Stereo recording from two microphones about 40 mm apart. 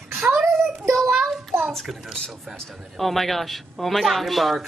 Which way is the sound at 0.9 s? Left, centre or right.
Centre.